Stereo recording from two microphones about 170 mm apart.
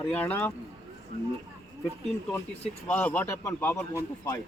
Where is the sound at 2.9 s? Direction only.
10° left (ahead or behind).